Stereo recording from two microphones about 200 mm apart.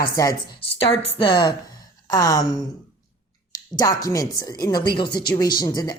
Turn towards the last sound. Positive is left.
turn(degrees=20)  # may be behind; listen again after turning